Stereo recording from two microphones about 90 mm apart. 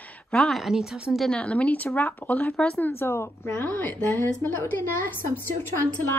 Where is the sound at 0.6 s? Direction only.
5° right (ahead or behind).